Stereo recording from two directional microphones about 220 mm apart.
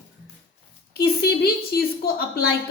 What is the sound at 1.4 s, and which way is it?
A woman's voice, 45° left (ahead or behind).